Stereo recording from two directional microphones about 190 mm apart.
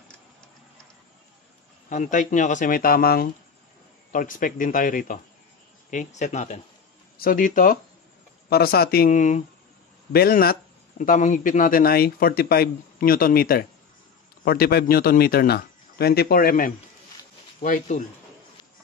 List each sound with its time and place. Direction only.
1.9 s speech: 40° left (ahead or behind)
10.1 s speech: 50° left (ahead or behind)